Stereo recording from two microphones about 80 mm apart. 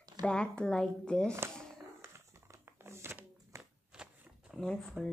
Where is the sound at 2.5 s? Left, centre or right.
Right.